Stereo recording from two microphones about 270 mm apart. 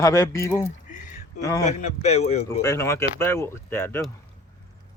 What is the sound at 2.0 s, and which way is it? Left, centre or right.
Speech, left.